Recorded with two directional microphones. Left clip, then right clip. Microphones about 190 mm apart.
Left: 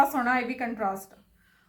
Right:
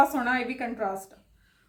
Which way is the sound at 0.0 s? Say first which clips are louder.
Even; 15° right (ahead or behind).